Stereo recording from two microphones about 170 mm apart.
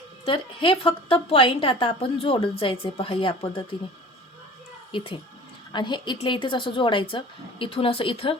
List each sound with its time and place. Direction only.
0.3 s a woman's voice: 30° left (ahead or behind)
4.9 s a woman's voice: 30° left (ahead or behind)